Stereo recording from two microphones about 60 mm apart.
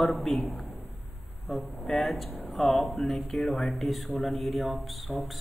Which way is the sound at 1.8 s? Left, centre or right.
Centre.